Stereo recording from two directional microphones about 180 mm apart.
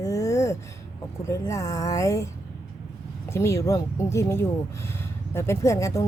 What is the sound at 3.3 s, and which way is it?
A woman's voice, 15° left (ahead or behind).